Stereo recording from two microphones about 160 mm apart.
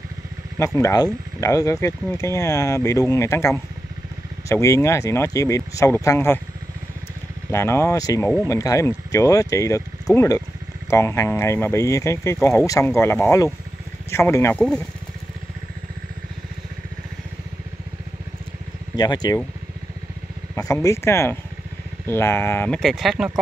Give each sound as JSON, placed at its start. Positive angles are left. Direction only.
{"t": 0.7, "sound": "speech", "side_deg": 20}
{"t": 7.5, "sound": "speech", "side_deg": 15}
{"t": 14.6, "sound": "speech", "side_deg": 5}
{"t": 18.9, "sound": "speech", "side_deg": 25}
{"t": 20.8, "sound": "speech", "side_deg": 15}